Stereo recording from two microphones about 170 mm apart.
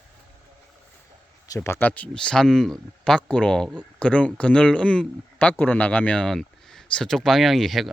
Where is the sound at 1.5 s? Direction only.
15° left (ahead or behind).